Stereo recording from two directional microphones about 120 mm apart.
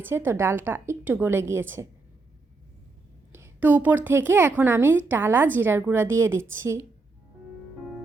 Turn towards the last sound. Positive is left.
turn(degrees=-25)  # may be behind; listen again after turning